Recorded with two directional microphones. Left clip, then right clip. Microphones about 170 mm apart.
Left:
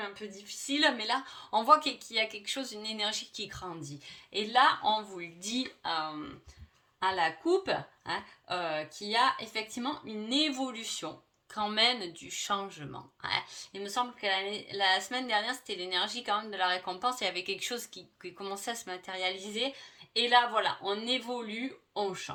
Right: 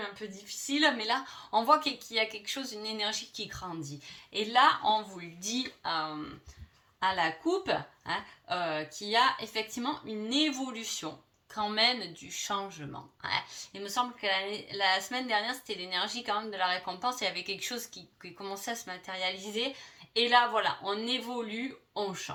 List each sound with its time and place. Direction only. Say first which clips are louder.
0.4 s speech: right 1 dB; 40° left (ahead or behind)